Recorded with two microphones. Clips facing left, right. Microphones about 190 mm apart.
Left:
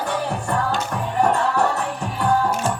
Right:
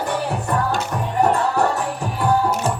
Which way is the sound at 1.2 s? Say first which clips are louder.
Right 1 dB; 5° right (ahead or behind).